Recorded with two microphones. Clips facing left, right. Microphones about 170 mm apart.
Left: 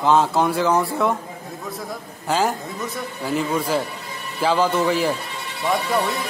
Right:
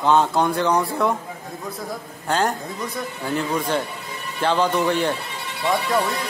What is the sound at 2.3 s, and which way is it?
A man's voice, 5° left (ahead or behind).